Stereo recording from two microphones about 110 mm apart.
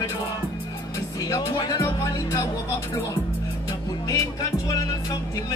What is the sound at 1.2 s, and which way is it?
Speech, 35° left (ahead or behind).